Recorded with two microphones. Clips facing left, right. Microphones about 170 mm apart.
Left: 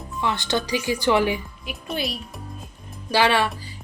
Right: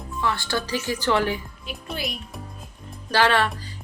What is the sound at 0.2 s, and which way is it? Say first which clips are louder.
A woman's voice: left 2 dB; 20° left (ahead or behind).